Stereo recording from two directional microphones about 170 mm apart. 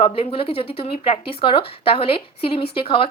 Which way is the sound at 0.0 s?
35° left (ahead or behind).